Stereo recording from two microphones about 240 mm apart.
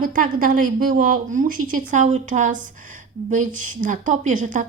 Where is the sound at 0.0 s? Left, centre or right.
Right.